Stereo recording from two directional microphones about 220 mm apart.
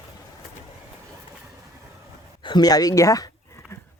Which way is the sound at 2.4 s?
20° left (ahead or behind).